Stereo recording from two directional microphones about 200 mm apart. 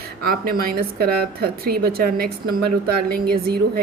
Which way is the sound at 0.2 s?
50° right (ahead or behind).